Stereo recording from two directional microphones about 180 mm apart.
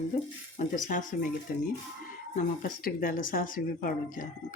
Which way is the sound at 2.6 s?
55° left (ahead or behind).